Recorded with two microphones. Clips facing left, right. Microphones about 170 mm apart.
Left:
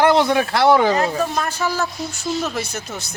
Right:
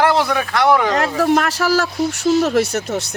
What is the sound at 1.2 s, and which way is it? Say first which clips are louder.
Speech: right 6 dB; 75° right (ahead or behind).